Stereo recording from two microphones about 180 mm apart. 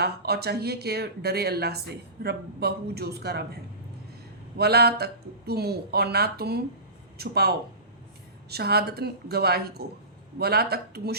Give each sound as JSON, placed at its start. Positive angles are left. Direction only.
{"t": 0.0, "sound": "speech", "side_deg": -60}
{"t": 4.5, "sound": "speech", "side_deg": -65}